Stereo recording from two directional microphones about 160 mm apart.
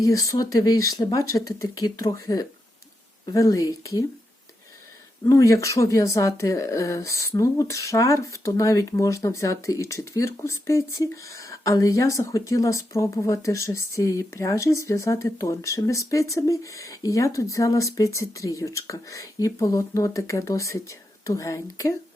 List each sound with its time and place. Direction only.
0.0 s speech: 20° left (ahead or behind)
5.2 s speech: 20° left (ahead or behind)